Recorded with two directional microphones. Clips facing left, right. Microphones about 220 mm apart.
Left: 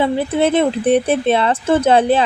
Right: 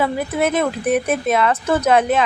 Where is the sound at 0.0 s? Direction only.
30° left (ahead or behind).